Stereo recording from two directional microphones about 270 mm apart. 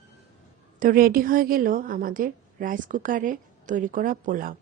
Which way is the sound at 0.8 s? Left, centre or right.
Right.